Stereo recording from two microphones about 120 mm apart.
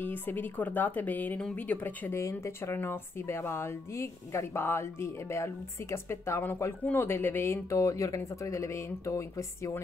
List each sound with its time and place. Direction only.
0.0 s a woman's voice: 15° left (ahead or behind)